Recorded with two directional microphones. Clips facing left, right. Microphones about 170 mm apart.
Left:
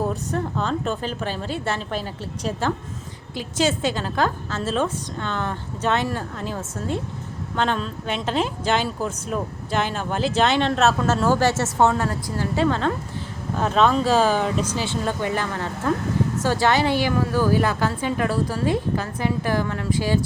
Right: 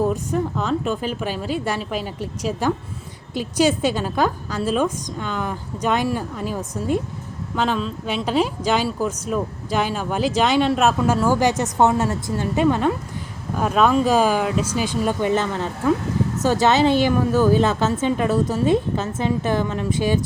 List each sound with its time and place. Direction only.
0.1 s speech: 10° right (ahead or behind)
15.0 s a woman's voice: 20° right (ahead or behind)